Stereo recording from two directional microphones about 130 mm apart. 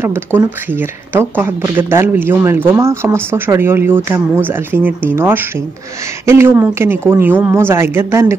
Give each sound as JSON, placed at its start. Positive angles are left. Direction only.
{"t": 0.0, "sound": "speech", "side_deg": -20}